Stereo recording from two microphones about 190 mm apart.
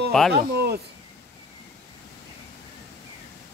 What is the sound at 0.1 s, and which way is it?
Speech, 5° left (ahead or behind).